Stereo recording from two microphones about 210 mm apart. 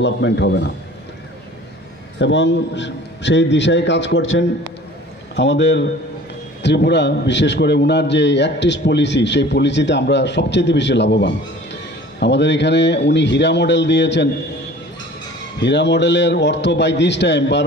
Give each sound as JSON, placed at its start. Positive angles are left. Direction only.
{"t": 0.0, "sound": "a man's voice", "side_deg": 55}
{"t": 2.1, "sound": "a man's voice", "side_deg": 60}
{"t": 15.6, "sound": "a man's voice", "side_deg": 55}